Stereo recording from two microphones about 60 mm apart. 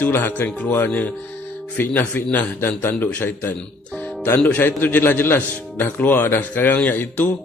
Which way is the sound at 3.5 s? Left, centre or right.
Left.